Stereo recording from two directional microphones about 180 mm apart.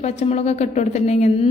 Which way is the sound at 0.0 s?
35° left (ahead or behind).